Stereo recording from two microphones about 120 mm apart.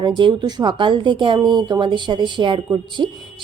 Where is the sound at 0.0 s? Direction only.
40° right (ahead or behind).